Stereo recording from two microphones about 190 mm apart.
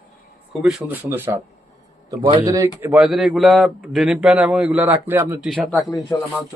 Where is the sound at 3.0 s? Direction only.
Centre (ahead or behind).